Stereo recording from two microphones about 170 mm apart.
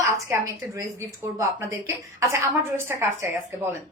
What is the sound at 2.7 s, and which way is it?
Speech, 15° right (ahead or behind).